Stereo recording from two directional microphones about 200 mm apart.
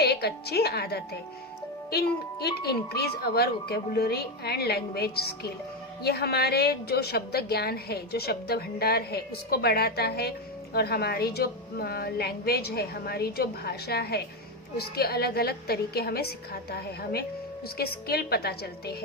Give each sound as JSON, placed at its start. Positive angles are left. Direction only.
{"t": 0.0, "sound": "a woman's voice", "side_deg": 50}